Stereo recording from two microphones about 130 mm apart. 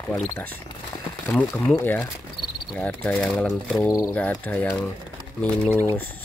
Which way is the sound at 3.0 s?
5° left (ahead or behind).